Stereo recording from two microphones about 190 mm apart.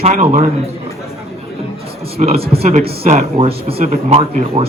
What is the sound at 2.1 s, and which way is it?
Speech, 35° right (ahead or behind).